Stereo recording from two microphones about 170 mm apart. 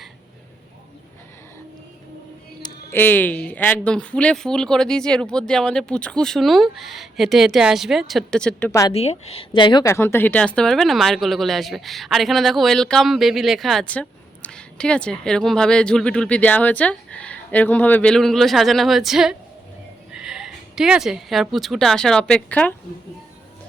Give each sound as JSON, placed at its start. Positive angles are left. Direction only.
{"t": 2.9, "sound": "speech", "side_deg": 10}
{"t": 8.9, "sound": "a woman's voice", "side_deg": 40}
{"t": 9.8, "sound": "a woman's voice", "side_deg": 15}